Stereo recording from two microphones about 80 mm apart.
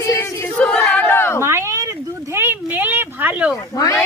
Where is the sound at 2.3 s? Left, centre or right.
Right.